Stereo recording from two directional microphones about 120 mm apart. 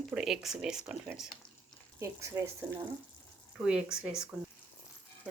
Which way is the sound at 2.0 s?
25° right (ahead or behind).